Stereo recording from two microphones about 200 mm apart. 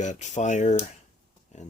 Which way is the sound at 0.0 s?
35° left (ahead or behind).